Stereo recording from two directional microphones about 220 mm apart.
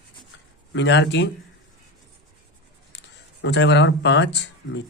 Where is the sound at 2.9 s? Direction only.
50° left (ahead or behind).